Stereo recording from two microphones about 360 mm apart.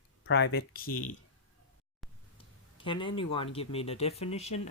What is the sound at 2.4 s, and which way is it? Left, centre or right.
Speech, centre.